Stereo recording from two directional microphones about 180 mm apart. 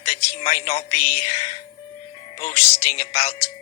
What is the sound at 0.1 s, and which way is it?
A man's voice, 35° left (ahead or behind).